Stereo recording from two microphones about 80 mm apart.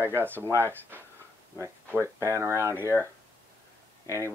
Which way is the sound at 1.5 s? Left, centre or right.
Right.